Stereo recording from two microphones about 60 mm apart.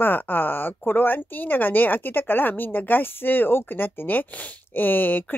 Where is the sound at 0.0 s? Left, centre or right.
Left.